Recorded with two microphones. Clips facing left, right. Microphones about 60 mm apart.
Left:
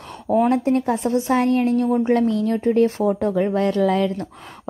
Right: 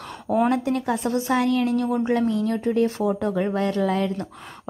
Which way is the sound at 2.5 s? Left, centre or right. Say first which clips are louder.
Left 4 dB; left.